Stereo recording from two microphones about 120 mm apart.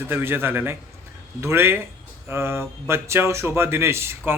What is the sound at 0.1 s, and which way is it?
A man's voice, 15° right (ahead or behind).